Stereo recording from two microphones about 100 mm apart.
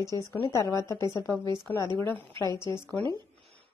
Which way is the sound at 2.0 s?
20° left (ahead or behind).